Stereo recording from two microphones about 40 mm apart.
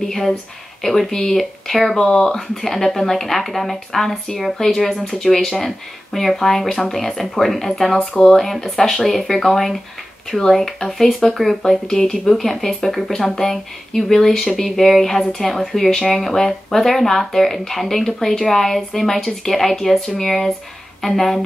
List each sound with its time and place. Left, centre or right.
0.0 s speech: centre
2.0 s speech: centre